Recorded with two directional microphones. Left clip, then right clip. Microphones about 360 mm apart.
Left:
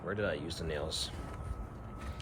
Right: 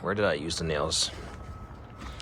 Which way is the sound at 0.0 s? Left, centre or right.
Centre.